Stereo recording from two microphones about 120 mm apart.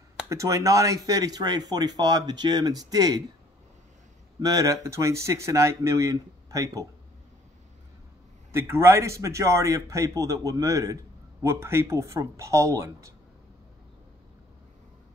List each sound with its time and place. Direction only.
0.3 s speech: 25° right (ahead or behind)
4.4 s speech: 30° right (ahead or behind)
8.5 s speech: 20° right (ahead or behind)